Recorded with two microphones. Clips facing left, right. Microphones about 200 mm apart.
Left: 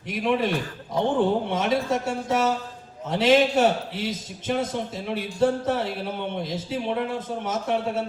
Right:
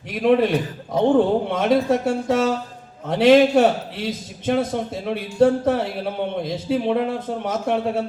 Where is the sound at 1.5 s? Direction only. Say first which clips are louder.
Right 6 dB; 60° right (ahead or behind).